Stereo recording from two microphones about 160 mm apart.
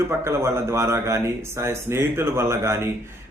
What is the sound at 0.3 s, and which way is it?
A man's voice, 15° right (ahead or behind).